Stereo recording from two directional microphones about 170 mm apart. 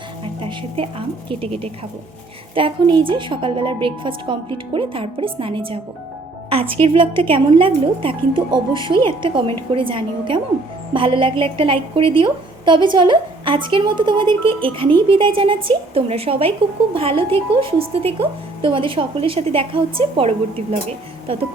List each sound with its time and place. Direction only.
0.4 s a woman's voice: 35° right (ahead or behind)